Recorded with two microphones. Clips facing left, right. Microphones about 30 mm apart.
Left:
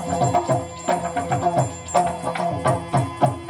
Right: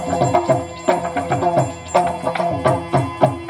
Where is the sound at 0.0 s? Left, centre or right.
Centre.